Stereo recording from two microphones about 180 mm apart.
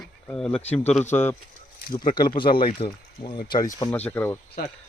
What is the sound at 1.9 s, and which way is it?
Speech, 25° left (ahead or behind).